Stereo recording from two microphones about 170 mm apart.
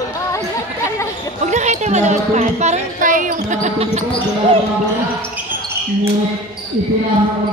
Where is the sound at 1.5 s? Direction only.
45° right (ahead or behind).